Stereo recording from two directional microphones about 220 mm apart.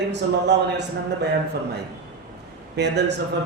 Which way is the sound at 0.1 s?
50° right (ahead or behind).